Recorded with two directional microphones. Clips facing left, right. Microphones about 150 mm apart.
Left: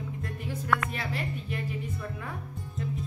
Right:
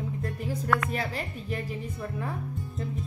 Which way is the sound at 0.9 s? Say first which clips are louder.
Right 2 dB; 40° right (ahead or behind).